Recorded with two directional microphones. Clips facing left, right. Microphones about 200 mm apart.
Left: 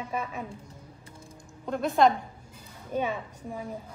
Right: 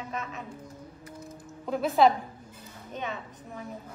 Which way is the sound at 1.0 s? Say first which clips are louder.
Right 8 dB; 30° left (ahead or behind).